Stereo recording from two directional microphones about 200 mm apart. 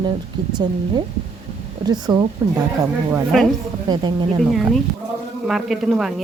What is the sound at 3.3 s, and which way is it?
Speech, centre (ahead or behind).